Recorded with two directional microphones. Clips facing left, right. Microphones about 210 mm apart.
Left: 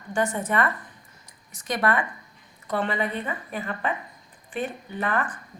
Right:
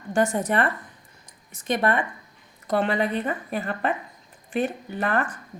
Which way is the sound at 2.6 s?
40° right (ahead or behind).